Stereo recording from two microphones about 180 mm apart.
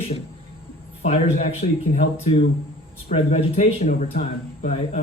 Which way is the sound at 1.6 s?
50° left (ahead or behind).